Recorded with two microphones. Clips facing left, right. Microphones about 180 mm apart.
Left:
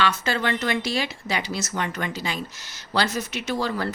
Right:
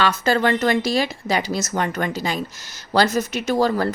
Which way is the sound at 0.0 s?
40° right (ahead or behind).